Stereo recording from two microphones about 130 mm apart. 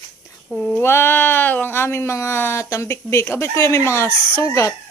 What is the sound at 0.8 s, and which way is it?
Speech, 20° left (ahead or behind).